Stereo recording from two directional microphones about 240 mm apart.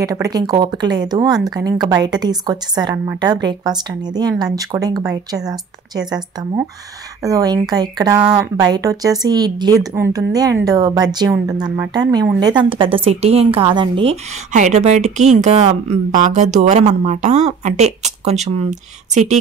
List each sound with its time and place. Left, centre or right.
0.0 s speech: centre